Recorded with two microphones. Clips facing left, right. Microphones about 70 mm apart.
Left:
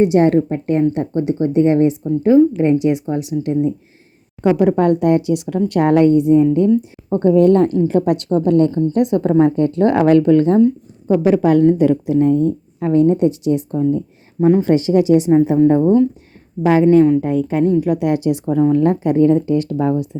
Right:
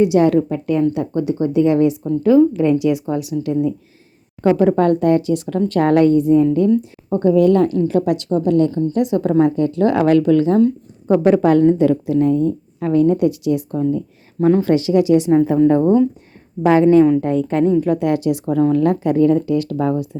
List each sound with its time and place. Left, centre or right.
0.0 s a woman's voice: left
4.4 s a woman's voice: centre
7.1 s a woman's voice: left
11.2 s a woman's voice: centre
11.8 s a woman's voice: centre
12.3 s a woman's voice: left
15.3 s a woman's voice: centre
16.6 s a woman's voice: centre
18.1 s a woman's voice: left
18.4 s a woman's voice: centre